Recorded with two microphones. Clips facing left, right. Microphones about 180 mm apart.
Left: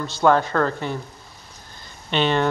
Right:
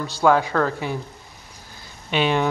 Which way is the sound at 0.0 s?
10° right (ahead or behind).